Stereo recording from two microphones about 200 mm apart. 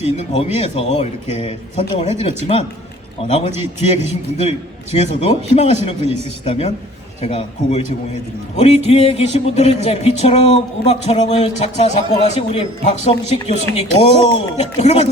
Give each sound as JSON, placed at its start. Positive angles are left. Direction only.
{"t": 0.0, "sound": "speech", "side_deg": 35}